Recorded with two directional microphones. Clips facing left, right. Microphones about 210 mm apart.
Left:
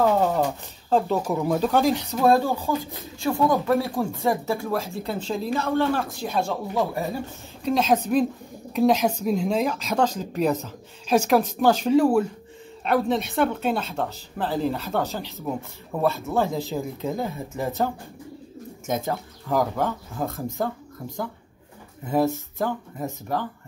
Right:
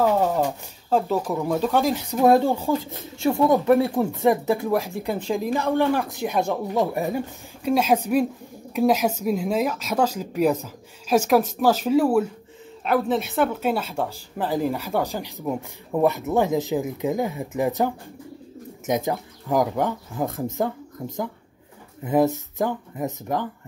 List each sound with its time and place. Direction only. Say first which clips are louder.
0.0 s speech: even; 10° right (ahead or behind)
2.1 s speech: right 4 dB; 20° right (ahead or behind)
3.5 s speech: right 4 dB; 15° right (ahead or behind)